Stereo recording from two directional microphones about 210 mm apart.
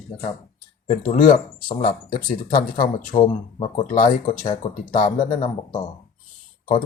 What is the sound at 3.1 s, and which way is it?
Speech, 25° left (ahead or behind).